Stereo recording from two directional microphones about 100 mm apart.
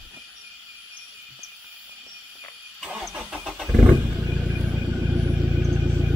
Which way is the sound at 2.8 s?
10° right (ahead or behind).